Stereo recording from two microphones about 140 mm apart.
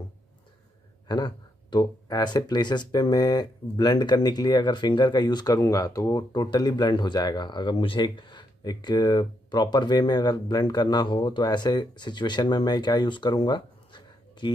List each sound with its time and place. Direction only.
1.0 s speech: 30° left (ahead or behind)